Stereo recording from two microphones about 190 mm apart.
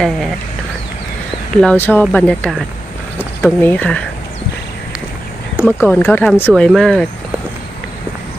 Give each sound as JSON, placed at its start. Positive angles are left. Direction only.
{"t": 1.5, "sound": "speech", "side_deg": 5}
{"t": 5.6, "sound": "speech", "side_deg": -5}
{"t": 5.9, "sound": "speech", "side_deg": 10}